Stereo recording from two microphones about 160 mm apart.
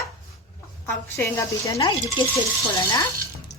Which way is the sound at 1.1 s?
15° left (ahead or behind).